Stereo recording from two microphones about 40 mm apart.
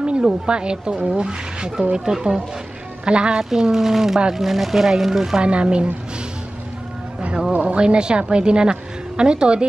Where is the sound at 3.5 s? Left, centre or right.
Centre.